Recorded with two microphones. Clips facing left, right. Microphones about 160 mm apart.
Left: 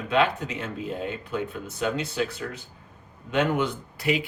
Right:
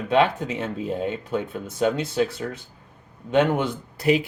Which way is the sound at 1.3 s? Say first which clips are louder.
Right 3 dB; 45° right (ahead or behind).